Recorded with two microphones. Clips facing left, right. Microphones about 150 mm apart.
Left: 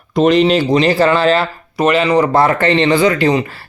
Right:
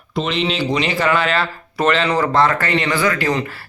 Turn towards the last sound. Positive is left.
turn(degrees=25)  # may be behind; listen again after turning